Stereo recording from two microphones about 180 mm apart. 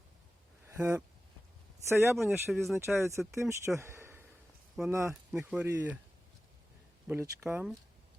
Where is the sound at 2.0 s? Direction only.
Centre (ahead or behind).